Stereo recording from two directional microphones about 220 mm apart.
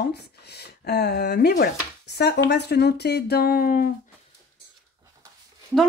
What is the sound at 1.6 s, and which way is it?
Chopping, 50° left (ahead or behind).